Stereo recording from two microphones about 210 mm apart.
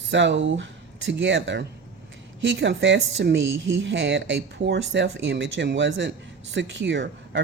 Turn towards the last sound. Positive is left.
turn(degrees=-55)  # may be behind; listen again after turning